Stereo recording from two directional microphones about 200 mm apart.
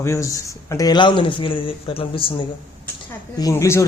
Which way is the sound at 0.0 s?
15° left (ahead or behind).